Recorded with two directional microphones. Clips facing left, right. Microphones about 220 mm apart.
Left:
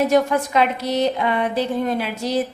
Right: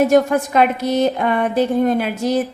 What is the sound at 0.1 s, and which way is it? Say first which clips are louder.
A woman's voice: right 3 dB; 50° right (ahead or behind).